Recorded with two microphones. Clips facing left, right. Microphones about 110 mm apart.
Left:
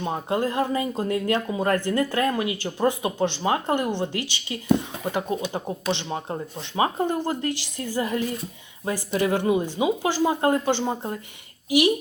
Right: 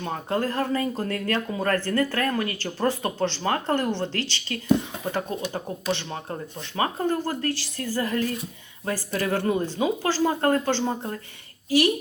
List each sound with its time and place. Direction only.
0.0 s speech: 15° left (ahead or behind)